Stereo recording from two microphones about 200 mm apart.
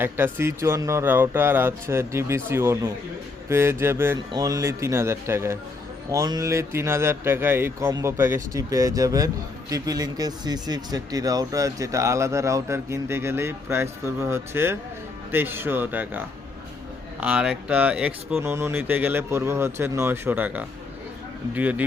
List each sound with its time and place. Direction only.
0.0 s speech: 10° right (ahead or behind)